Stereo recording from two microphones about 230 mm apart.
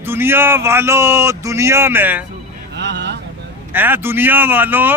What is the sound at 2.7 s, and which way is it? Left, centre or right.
Vehicle, right.